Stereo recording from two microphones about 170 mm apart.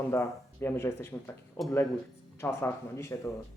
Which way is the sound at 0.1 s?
15° left (ahead or behind).